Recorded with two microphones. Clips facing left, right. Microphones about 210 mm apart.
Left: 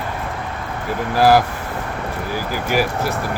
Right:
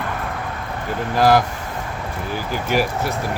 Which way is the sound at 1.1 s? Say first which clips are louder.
Left 2 dB; 10° left (ahead or behind).